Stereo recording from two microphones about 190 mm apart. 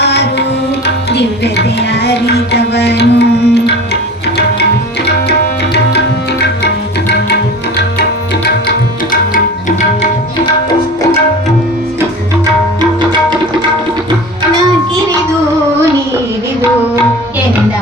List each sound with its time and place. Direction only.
0.0 s music: 60° left (ahead or behind)
1.1 s speech: 65° left (ahead or behind)
2.0 s music: 60° left (ahead or behind)